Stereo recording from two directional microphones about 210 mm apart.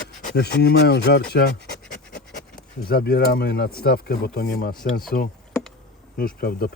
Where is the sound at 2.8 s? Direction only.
45° left (ahead or behind).